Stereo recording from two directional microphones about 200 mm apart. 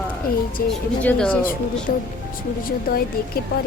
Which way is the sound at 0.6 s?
45° left (ahead or behind).